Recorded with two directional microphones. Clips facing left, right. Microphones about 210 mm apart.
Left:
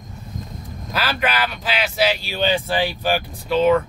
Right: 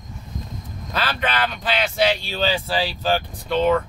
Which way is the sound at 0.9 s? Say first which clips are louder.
Left 1 dB; 10° left (ahead or behind).